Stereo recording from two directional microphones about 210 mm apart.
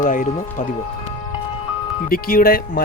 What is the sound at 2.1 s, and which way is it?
Speech, 45° left (ahead or behind).